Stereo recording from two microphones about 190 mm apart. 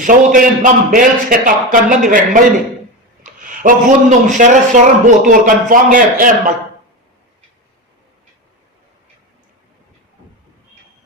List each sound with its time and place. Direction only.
0.0 s a man's voice: 45° right (ahead or behind)